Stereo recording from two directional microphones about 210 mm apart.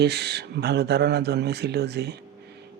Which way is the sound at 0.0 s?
50° right (ahead or behind).